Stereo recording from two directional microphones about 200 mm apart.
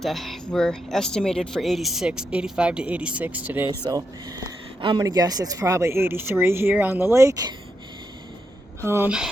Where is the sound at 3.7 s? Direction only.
20° right (ahead or behind).